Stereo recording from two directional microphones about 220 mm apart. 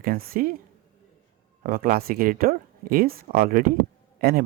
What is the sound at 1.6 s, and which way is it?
Speech, 40° right (ahead or behind).